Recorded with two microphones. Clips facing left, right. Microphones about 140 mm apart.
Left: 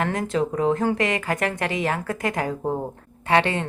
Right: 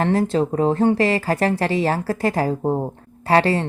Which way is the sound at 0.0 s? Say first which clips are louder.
Right 5 dB; 30° right (ahead or behind).